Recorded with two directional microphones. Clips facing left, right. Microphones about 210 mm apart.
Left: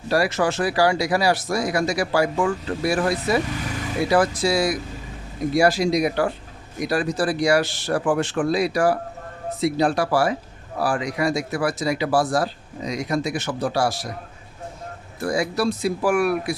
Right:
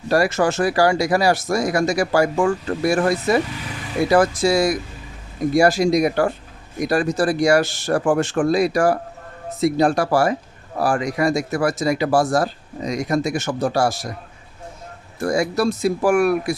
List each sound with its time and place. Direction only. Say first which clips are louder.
0.1 s speech: right 3 dB; 45° right (ahead or behind)
15.2 s speech: right 3 dB; 45° right (ahead or behind)